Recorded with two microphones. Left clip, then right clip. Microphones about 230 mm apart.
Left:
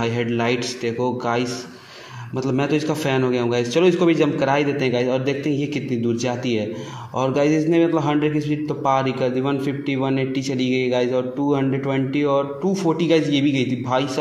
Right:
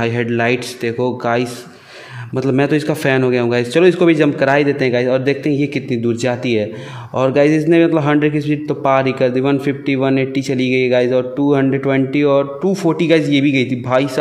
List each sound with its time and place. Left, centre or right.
0.0 s a man's voice: right